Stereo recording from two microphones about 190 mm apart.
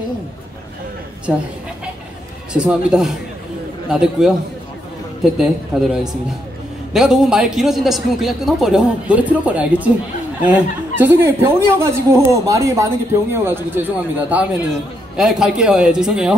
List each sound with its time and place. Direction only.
2.5 s a man's voice: 5° right (ahead or behind)